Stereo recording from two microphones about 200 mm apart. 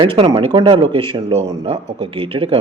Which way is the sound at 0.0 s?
25° right (ahead or behind).